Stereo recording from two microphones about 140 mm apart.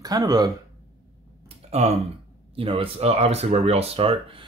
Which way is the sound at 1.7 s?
50° right (ahead or behind).